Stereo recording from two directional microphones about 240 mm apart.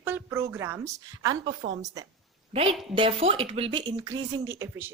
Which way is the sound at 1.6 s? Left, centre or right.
Right.